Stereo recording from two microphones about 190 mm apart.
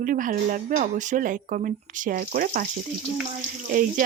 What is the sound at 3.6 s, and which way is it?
Speech, 45° right (ahead or behind).